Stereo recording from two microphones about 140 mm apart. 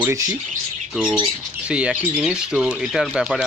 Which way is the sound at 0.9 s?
5° right (ahead or behind).